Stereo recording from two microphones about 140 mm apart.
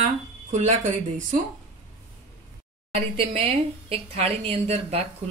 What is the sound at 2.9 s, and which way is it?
Speech, 40° right (ahead or behind).